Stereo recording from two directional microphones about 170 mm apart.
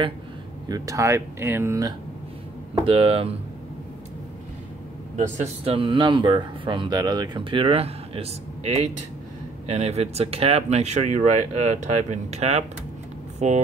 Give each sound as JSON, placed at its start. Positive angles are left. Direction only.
{"t": 0.7, "sound": "speech", "side_deg": -20}
{"t": 2.8, "sound": "speech", "side_deg": -35}
{"t": 5.1, "sound": "speech", "side_deg": -40}